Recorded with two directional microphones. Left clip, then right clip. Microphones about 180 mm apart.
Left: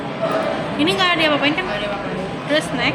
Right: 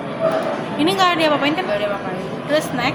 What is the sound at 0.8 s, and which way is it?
Speech, 35° right (ahead or behind).